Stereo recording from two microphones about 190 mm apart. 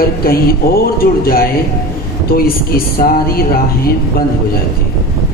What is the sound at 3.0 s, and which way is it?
Speech, 50° left (ahead or behind).